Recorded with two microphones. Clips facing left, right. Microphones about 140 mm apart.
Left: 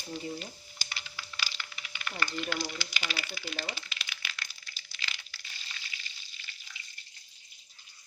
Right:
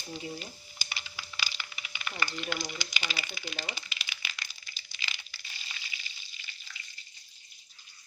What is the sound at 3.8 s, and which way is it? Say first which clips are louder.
Crumpling: even; 5° right (ahead or behind).